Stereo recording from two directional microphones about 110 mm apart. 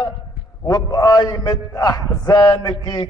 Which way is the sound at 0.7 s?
35° left (ahead or behind).